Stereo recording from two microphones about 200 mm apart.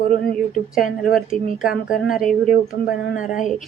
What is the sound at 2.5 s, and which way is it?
Speech, 45° left (ahead or behind).